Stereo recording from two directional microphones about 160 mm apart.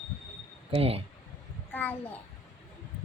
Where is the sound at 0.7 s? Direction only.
40° right (ahead or behind).